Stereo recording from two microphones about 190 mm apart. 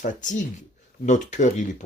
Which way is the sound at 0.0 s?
45° left (ahead or behind).